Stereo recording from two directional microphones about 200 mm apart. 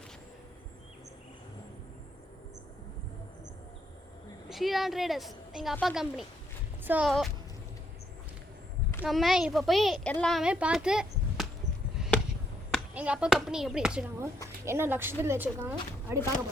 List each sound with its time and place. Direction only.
4.4 s a woman's voice: centre (ahead or behind)
9.0 s a woman's voice: centre (ahead or behind)
11.9 s a sound: centre (ahead or behind)
12.9 s a woman's voice: 5° right (ahead or behind)